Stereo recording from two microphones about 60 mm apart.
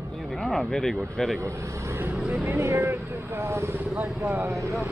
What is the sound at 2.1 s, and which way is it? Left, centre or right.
Speech, centre.